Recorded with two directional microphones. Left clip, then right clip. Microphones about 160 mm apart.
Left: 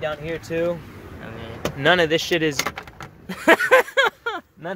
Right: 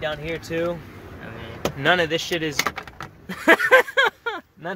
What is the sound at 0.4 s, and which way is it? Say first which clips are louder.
Speech: left 3 dB; 20° left (ahead or behind).